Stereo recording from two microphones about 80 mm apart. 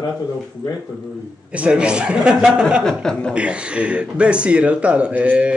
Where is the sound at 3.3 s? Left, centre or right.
Centre.